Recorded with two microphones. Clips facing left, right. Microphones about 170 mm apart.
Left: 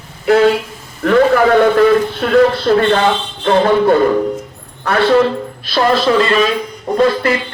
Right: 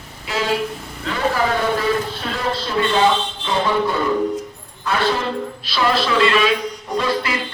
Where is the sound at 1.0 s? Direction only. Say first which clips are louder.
Left 10 dB; 60° left (ahead or behind).